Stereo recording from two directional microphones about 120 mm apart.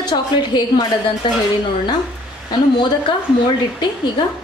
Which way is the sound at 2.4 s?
40° left (ahead or behind).